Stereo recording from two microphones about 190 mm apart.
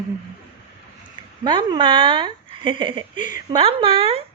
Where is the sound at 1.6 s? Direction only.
25° right (ahead or behind).